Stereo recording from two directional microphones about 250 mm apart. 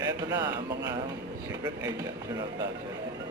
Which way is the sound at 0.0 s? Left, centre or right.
Centre.